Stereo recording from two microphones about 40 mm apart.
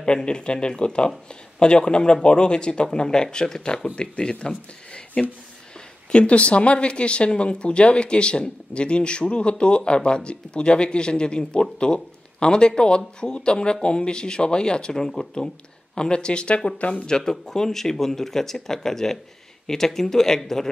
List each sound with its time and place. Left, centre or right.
0.0 s speech: left
16.9 s speech: centre